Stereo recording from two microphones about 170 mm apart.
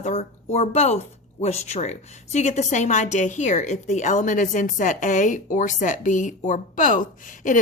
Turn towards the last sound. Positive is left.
turn(degrees=50)  # may be behind; listen again after turning